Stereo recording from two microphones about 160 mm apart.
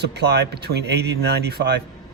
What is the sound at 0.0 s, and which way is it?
Speech, 90° right.